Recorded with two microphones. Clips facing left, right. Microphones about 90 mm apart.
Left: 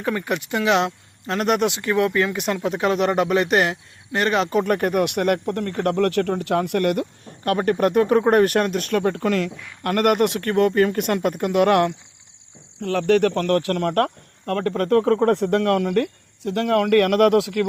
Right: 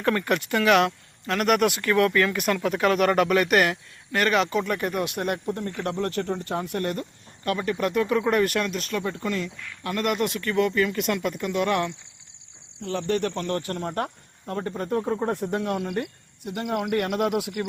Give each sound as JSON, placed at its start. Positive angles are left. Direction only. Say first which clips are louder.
{"t": 0.0, "sound": "speech", "louder": "even", "side_deg": 15}
{"t": 5.7, "sound": "speech", "louder": "left 11 dB", "side_deg": 55}